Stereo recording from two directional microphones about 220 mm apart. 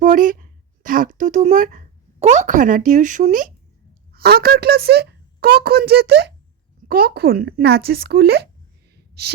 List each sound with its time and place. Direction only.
0.0 s a woman's voice: 35° right (ahead or behind)